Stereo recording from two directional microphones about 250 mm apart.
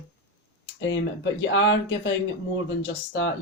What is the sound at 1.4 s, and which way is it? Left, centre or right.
Speech, left.